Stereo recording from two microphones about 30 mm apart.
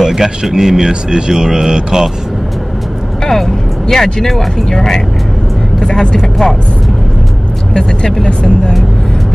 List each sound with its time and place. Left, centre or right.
0.0 s speech: centre
3.3 s speech: centre
4.6 s speech: centre
6.1 s speech: centre
7.7 s speech: left